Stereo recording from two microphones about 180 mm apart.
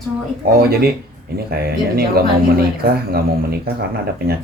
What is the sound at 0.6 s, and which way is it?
Speech, 60° right (ahead or behind).